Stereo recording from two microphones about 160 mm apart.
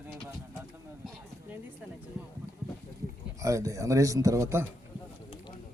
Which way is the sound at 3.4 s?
20° right (ahead or behind).